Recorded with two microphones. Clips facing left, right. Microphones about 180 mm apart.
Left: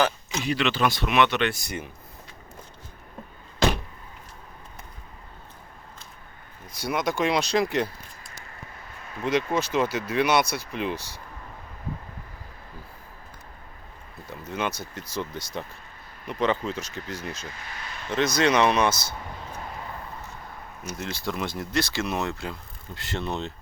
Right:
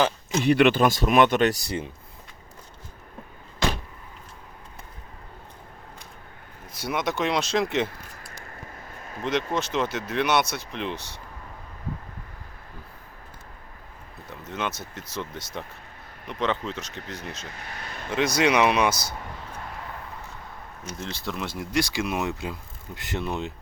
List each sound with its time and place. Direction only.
0.4 s speech: 55° right (ahead or behind); by 1.9 s 30° right (ahead or behind)
6.7 s speech: centre (ahead or behind)
9.0 s a sound: 45° right (ahead or behind)
9.5 s speech: centre (ahead or behind)
14.3 s speech: centre (ahead or behind)
17.5 s a sound: 60° right (ahead or behind)
18.3 s speech: 10° right (ahead or behind)
21.0 s speech: 5° left (ahead or behind); by 23.2 s 15° right (ahead or behind)
23.2 s speech: 5° right (ahead or behind)